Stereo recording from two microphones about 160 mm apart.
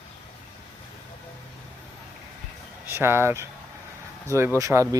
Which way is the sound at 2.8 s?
15° right (ahead or behind).